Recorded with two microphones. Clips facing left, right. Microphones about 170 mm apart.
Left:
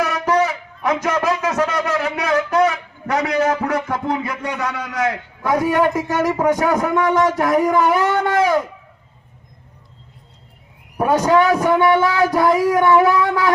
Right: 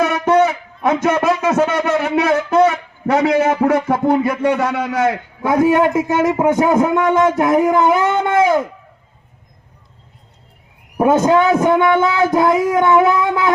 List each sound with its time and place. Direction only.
0.0 s speech: 25° right (ahead or behind)
10.9 s speech: 25° right (ahead or behind)